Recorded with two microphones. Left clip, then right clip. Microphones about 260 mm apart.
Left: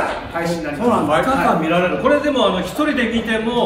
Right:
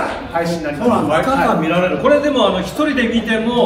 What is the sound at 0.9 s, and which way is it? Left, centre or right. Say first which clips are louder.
Speech: right 1 dB; centre.